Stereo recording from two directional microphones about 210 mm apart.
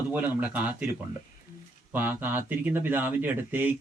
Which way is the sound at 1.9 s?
10° right (ahead or behind).